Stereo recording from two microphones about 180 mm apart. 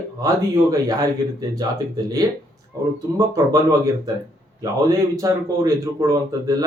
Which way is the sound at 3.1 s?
20° right (ahead or behind).